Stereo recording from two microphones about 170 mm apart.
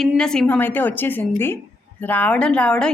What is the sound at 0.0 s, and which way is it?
A woman's voice, 5° left (ahead or behind).